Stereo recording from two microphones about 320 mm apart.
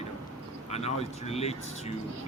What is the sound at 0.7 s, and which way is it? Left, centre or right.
Speech, centre.